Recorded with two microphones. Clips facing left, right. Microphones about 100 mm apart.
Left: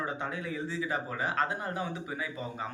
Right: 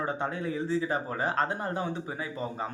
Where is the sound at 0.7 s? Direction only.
35° right (ahead or behind).